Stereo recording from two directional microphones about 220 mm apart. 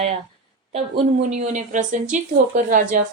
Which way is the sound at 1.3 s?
35° right (ahead or behind).